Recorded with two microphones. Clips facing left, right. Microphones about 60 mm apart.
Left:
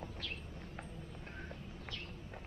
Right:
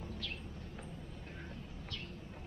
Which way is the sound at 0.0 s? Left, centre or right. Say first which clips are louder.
Right 1 dB; centre.